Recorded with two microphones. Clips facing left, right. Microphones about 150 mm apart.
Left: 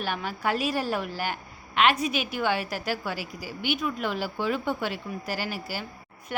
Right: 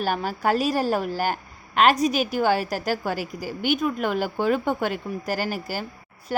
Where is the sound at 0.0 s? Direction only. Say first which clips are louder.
Right 5 dB; 40° right (ahead or behind).